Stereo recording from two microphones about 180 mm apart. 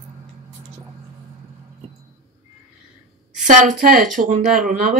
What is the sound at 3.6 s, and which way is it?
Speech, 50° right (ahead or behind).